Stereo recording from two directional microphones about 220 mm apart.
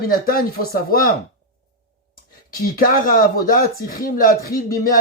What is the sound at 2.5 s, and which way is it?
Speech, 40° left (ahead or behind).